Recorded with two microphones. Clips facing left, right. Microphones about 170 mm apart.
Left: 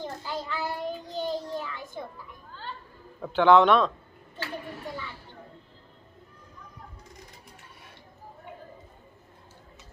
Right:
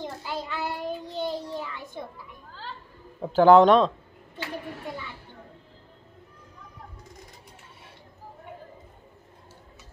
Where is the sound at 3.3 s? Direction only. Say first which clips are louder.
Right 3 dB; 40° right (ahead or behind).